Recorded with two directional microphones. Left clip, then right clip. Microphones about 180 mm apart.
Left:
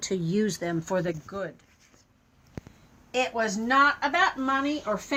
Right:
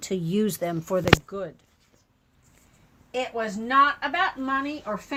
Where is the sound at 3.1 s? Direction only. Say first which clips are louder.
Left 2 dB; 10° right (ahead or behind).